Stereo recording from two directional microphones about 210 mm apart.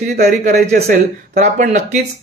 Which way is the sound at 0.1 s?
40° right (ahead or behind).